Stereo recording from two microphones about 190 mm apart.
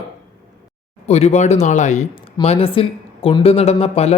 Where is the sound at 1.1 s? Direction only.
35° left (ahead or behind).